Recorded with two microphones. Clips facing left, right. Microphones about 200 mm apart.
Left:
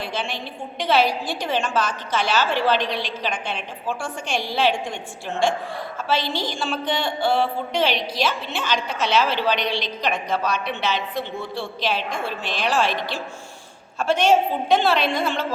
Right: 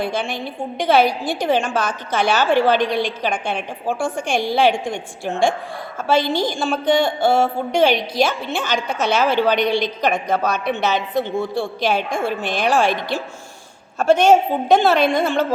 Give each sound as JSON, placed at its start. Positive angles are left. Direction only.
{"t": 0.0, "sound": "a woman's voice", "side_deg": -50}
{"t": 6.1, "sound": "a woman's voice", "side_deg": -50}